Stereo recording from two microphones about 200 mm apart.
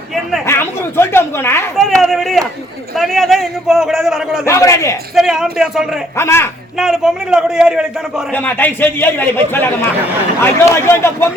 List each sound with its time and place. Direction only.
0.1 s a sound: centre (ahead or behind)
0.4 s a man's voice: 10° left (ahead or behind)
1.7 s a man's voice: centre (ahead or behind)
4.4 s a man's voice: 15° left (ahead or behind)
5.1 s a man's voice: centre (ahead or behind)
6.1 s a man's voice: 15° left (ahead or behind)
6.7 s a man's voice: centre (ahead or behind)
8.3 s a man's voice: 10° left (ahead or behind)